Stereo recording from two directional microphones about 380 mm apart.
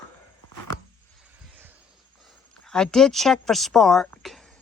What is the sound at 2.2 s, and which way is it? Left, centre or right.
Speech, centre.